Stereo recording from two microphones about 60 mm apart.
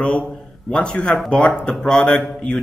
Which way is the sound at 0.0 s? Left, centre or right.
Left.